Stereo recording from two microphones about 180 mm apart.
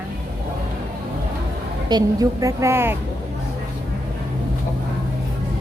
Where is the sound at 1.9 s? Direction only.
20° right (ahead or behind).